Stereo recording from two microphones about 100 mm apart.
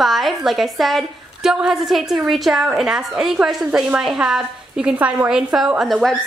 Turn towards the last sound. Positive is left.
turn(degrees=0)  # may be behind; listen again after turning